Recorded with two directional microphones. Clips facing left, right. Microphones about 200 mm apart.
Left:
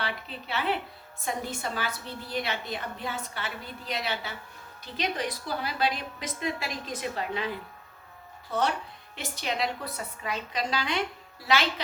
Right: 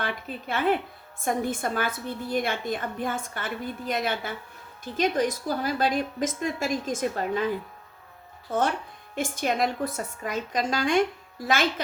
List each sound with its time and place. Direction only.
0.0 s a woman's voice: 50° right (ahead or behind)